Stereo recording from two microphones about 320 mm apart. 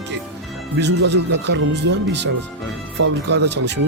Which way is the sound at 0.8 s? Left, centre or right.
Right.